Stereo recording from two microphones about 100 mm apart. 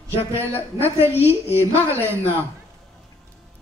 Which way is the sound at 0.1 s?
80° left.